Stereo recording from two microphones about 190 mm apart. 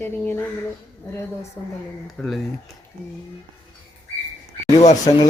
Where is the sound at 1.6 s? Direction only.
10° left (ahead or behind).